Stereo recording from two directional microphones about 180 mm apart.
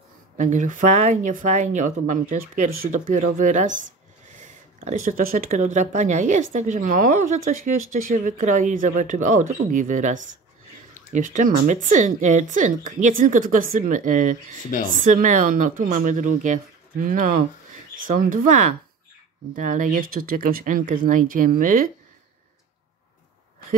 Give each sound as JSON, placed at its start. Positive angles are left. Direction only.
{"t": 0.4, "sound": "speech", "side_deg": -45}
{"t": 14.7, "sound": "speech", "side_deg": 50}
{"t": 15.0, "sound": "speech", "side_deg": -45}